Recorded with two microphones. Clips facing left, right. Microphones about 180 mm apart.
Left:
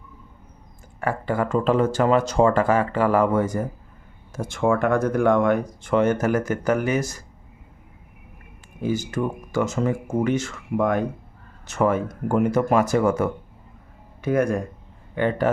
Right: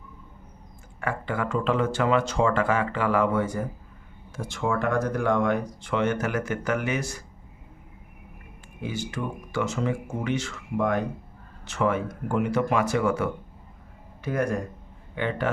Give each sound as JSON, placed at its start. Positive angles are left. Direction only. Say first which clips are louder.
{"t": 1.0, "sound": "speech", "louder": "left 5 dB", "side_deg": 40}
{"t": 8.8, "sound": "a man's voice", "louder": "left 7 dB", "side_deg": 40}